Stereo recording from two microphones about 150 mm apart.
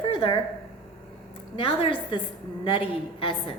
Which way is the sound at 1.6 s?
35° left (ahead or behind).